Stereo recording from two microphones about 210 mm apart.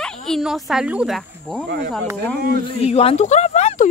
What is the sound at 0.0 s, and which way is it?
Speech, centre (ahead or behind).